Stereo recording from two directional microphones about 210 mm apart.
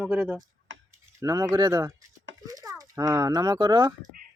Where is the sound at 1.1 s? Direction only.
15° right (ahead or behind).